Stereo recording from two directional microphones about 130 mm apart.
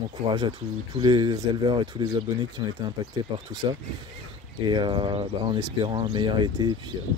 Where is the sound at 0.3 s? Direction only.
35° right (ahead or behind).